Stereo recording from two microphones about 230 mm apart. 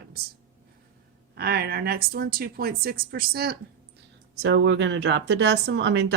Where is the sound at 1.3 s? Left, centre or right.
Right.